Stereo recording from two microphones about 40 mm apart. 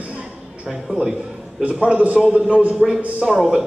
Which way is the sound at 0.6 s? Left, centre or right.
Centre.